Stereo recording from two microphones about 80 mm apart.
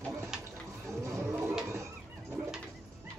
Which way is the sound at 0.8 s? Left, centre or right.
Right.